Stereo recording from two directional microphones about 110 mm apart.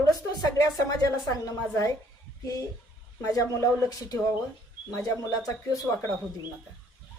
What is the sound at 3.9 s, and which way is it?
A woman's voice, 35° left (ahead or behind).